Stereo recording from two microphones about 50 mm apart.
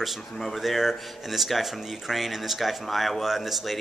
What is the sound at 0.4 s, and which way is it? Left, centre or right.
Speech, centre.